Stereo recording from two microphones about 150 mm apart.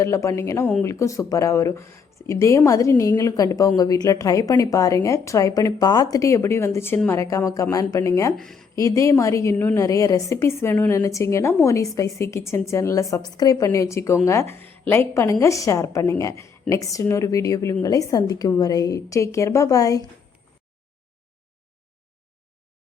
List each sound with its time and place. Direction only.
0.0 s speech: 20° left (ahead or behind)
8.4 s speech: 5° left (ahead or behind)
8.7 s speech: 20° left (ahead or behind)